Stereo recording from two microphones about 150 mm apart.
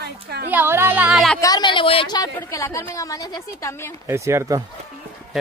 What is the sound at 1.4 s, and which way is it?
A woman's voice, 30° left (ahead or behind).